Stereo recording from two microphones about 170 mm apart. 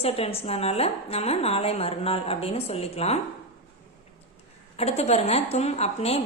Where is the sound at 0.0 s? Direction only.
35° left (ahead or behind).